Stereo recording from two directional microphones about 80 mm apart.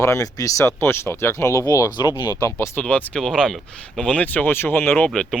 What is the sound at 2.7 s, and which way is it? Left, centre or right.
Speech, centre.